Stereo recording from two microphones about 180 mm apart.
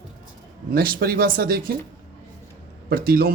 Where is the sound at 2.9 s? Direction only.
55° right (ahead or behind).